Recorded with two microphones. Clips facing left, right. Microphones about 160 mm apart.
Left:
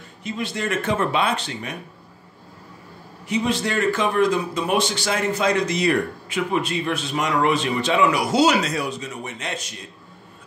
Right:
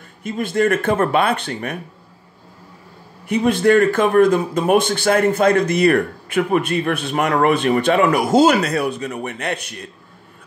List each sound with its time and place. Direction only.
0.2 s speech: 50° right (ahead or behind)
3.3 s speech: 55° right (ahead or behind)